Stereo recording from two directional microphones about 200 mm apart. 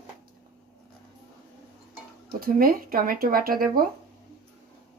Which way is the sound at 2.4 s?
45° right (ahead or behind).